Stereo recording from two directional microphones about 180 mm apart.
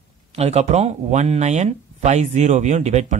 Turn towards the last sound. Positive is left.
turn(degrees=-40)  # may be behind; listen again after turning